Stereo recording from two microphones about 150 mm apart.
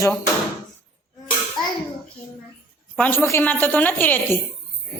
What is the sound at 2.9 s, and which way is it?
A woman's voice, 15° left (ahead or behind).